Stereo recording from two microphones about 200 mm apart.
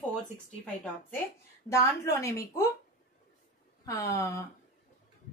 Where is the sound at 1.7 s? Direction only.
15° left (ahead or behind).